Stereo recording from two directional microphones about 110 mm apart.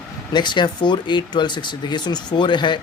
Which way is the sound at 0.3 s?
45° left (ahead or behind).